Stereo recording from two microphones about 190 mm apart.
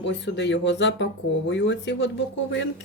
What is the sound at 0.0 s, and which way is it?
Speech, 70° left (ahead or behind).